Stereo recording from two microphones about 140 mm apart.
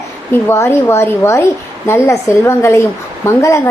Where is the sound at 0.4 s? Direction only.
15° left (ahead or behind).